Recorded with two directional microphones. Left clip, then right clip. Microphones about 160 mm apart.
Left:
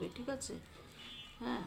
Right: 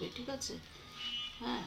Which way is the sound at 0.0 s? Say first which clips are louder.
Right 1 dB; 35° left (ahead or behind).